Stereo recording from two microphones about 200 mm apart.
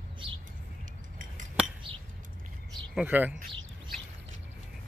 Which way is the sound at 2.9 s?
5° right (ahead or behind).